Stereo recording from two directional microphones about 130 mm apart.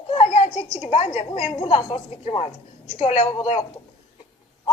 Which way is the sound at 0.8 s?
55° left (ahead or behind).